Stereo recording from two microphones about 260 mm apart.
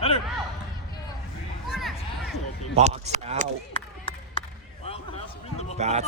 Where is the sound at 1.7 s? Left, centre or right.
Centre.